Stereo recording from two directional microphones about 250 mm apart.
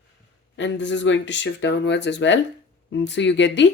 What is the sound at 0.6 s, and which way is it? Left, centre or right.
Speech, left.